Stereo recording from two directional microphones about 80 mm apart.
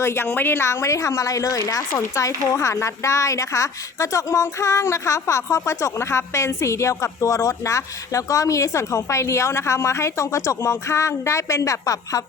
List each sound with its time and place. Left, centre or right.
0.0 s a woman's voice: left